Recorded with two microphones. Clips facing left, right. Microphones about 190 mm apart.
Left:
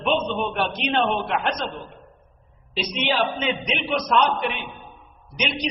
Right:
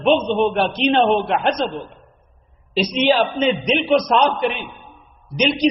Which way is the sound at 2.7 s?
35° right (ahead or behind).